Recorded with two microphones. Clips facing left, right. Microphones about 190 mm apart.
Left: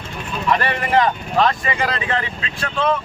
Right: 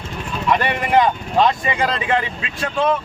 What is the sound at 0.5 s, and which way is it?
Speech, 15° right (ahead or behind).